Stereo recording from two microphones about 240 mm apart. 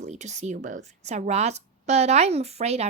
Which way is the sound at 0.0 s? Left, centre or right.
Right.